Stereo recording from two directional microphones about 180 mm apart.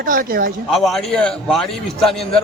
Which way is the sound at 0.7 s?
Centre (ahead or behind).